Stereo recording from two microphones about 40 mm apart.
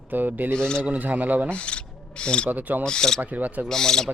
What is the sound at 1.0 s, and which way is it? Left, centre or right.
Speech, right.